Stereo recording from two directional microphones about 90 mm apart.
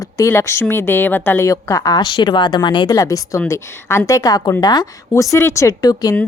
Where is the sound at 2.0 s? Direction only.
60° left (ahead or behind).